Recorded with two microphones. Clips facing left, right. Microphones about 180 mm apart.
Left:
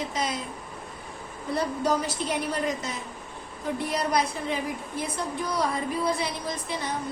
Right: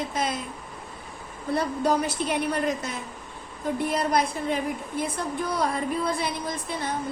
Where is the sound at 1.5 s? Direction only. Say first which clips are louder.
Right 2 dB; 60° right (ahead or behind).